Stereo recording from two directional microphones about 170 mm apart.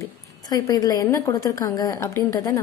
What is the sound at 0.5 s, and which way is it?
A woman's voice, 20° left (ahead or behind).